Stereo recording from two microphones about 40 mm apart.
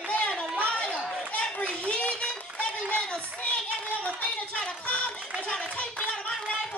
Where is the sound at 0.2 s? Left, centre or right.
Left.